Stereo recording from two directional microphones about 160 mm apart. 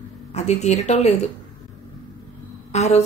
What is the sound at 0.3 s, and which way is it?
A woman's voice, 45° left (ahead or behind).